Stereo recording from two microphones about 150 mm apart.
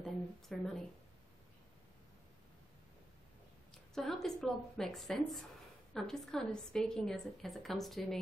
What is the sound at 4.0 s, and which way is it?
A woman's voice, 5° left (ahead or behind).